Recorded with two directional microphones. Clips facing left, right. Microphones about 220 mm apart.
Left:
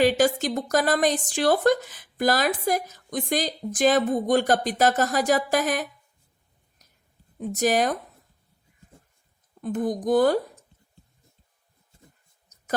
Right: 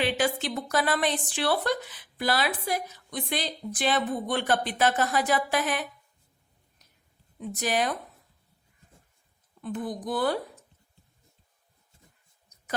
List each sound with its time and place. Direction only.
0.0 s speech: 40° left (ahead or behind)
7.3 s speech: 45° left (ahead or behind)
9.6 s speech: 45° left (ahead or behind)